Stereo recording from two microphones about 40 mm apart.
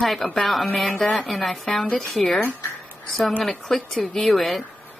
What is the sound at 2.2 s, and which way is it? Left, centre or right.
Speech, centre.